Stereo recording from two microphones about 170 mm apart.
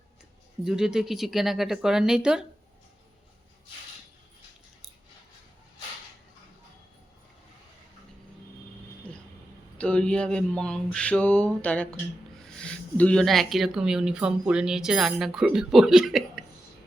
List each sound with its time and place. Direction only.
0.6 s speech: 5° right (ahead or behind)
9.7 s a sound: 5° left (ahead or behind)
12.4 s speech: 5° left (ahead or behind)